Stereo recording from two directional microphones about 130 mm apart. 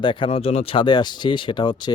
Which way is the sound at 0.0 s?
40° left (ahead or behind).